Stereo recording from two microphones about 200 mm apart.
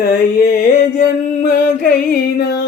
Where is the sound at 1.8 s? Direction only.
50° left (ahead or behind).